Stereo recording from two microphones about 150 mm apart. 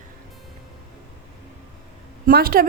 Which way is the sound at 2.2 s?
85° right.